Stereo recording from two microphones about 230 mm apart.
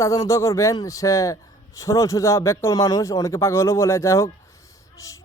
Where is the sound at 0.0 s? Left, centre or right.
Centre.